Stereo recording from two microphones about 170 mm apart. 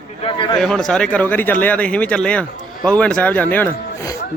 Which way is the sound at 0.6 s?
Centre (ahead or behind).